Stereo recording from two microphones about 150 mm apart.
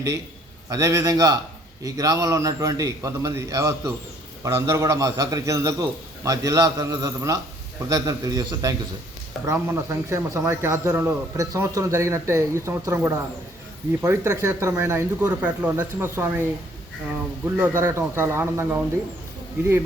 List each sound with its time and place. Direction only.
0.7 s speech: 20° right (ahead or behind)